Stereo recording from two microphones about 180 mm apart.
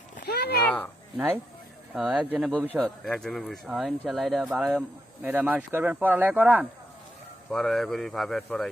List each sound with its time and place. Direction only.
0.3 s a sound: 60° left (ahead or behind)
0.6 s speech: 5° left (ahead or behind)
2.5 s speech: 5° left (ahead or behind)
7.5 s speech: centre (ahead or behind)